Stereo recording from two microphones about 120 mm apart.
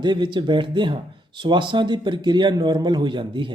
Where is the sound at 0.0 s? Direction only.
40° right (ahead or behind).